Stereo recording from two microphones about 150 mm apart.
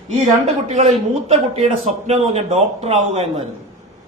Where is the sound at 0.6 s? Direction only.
45° right (ahead or behind).